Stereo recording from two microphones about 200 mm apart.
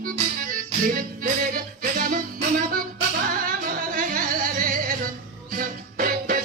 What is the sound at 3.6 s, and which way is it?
Music, 45° right (ahead or behind).